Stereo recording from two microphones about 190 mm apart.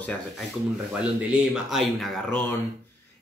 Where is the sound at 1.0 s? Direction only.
5° right (ahead or behind).